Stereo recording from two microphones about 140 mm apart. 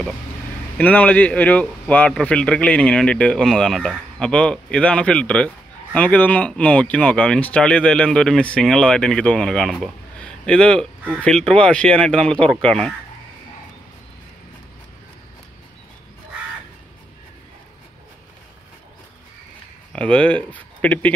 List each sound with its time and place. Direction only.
0.7 s speech: 10° left (ahead or behind)
19.9 s speech: 10° left (ahead or behind)